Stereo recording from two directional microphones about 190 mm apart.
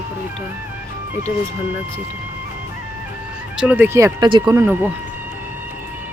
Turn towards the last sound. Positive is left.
turn(degrees=-10)  # may be behind; listen again after turning